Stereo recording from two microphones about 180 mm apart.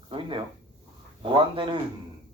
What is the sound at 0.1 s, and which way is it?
Speech, 30° right (ahead or behind).